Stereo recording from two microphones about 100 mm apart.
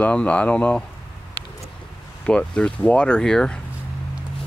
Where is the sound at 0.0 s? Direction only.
15° left (ahead or behind).